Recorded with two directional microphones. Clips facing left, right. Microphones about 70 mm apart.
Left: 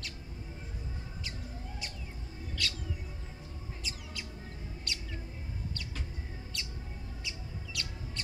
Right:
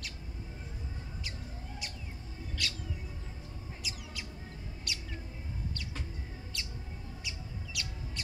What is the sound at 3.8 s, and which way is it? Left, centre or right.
Bird, centre.